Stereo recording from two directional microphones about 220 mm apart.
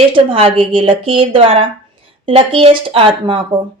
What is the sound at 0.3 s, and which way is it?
A woman's voice, 25° right (ahead or behind).